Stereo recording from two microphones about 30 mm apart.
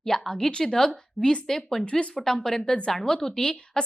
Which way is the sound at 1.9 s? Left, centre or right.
Left.